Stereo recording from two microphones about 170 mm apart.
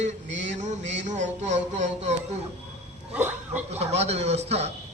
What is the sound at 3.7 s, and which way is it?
A man's voice, 40° right (ahead or behind).